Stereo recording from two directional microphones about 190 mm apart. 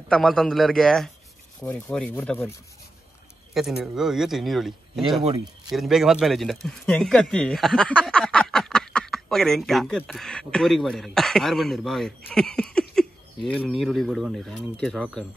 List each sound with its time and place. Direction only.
0.1 s speech: centre (ahead or behind)
3.5 s speech: centre (ahead or behind)